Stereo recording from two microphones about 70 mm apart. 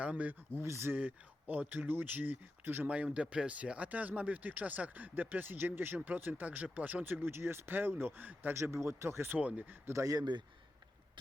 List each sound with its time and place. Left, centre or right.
0.0 s speech: right
0.5 s speech: right
0.9 s speech: right
8.5 s speech: right
9.4 s speech: centre
9.8 s speech: right